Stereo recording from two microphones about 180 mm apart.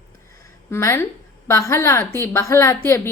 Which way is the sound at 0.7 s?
15° left (ahead or behind).